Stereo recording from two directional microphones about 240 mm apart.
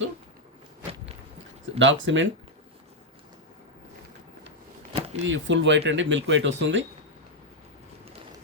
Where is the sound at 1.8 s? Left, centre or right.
Right.